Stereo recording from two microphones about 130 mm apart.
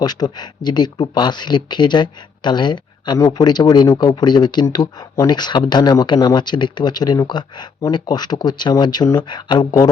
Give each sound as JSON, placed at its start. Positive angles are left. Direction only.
{"t": 0.0, "sound": "speech", "side_deg": 30}